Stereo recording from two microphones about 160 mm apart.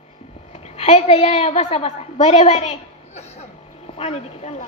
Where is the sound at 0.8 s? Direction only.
40° left (ahead or behind).